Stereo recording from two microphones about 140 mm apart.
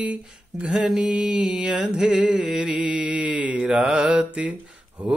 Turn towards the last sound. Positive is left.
turn(degrees=-5)  # may be behind; listen again after turning